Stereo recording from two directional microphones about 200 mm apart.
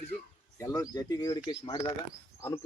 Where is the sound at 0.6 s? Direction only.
15° left (ahead or behind).